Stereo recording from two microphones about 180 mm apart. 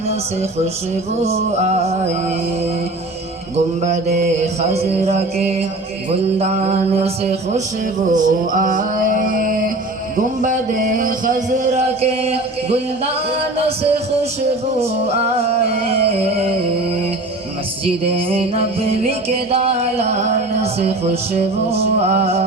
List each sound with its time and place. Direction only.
1.2 s music: 35° right (ahead or behind)
3.8 s music: 40° right (ahead or behind)
8.1 s music: 45° right (ahead or behind)
10.4 s a sound: 45° right (ahead or behind)
12.2 s music: 35° right (ahead or behind)
14.8 s music: 35° right (ahead or behind)
17.8 s music: 30° right (ahead or behind)